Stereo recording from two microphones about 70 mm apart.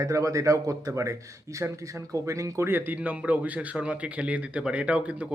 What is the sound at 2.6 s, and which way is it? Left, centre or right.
A man's voice, right.